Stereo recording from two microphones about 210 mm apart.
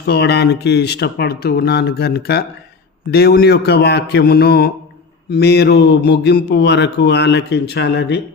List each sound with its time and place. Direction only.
0.1 s speech: 55° left (ahead or behind)